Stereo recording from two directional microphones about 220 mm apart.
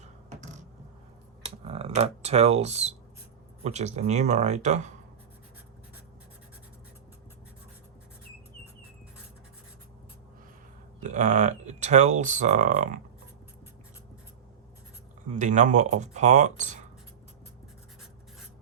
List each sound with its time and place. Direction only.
1.4 s speech: 25° right (ahead or behind)
11.0 s speech: 35° right (ahead or behind)
15.4 s speech: 35° right (ahead or behind)